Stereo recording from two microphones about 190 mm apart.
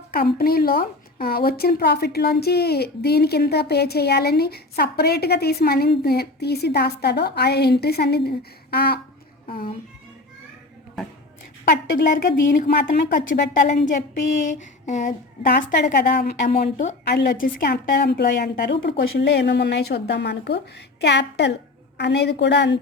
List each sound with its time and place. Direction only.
0.1 s a woman's voice: 50° left (ahead or behind)
11.6 s a woman's voice: 50° left (ahead or behind)
14.4 s a sound: 40° left (ahead or behind)
15.4 s a woman's voice: 60° left (ahead or behind)